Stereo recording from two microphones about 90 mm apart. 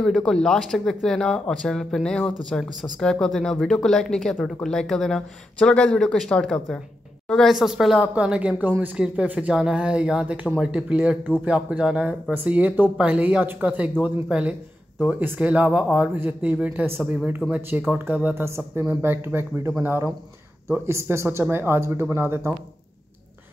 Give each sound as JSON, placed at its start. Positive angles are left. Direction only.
{"t": 0.0, "sound": "a woman's voice", "side_deg": 5}
{"t": 7.5, "sound": "speech", "side_deg": -5}
{"t": 17.6, "sound": "speech", "side_deg": -25}